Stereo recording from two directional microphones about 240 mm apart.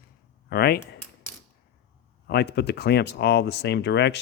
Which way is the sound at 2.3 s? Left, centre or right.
Left.